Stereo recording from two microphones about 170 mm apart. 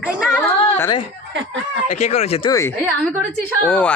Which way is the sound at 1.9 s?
40° left (ahead or behind).